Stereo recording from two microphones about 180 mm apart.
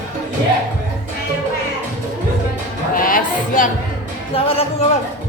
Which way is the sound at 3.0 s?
50° left (ahead or behind).